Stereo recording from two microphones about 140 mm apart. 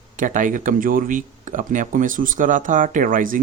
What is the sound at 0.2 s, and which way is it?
Speech, 70° right (ahead or behind).